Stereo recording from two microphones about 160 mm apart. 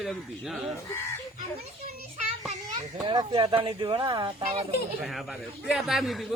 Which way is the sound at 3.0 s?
30° right (ahead or behind).